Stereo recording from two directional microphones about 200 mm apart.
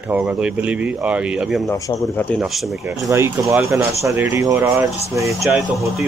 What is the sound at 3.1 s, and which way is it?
Speech, 15° right (ahead or behind).